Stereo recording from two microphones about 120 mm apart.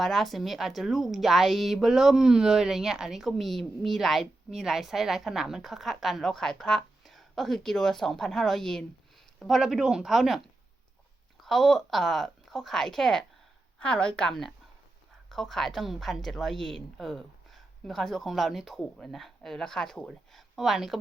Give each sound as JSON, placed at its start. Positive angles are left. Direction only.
{"t": 0.0, "sound": "a woman's voice", "side_deg": 0}
{"t": 11.4, "sound": "a woman's voice", "side_deg": 0}